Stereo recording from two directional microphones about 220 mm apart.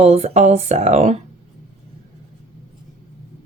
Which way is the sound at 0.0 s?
30° right (ahead or behind).